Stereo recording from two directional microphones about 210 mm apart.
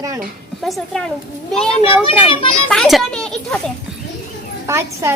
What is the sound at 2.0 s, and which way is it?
Speech, 25° left (ahead or behind).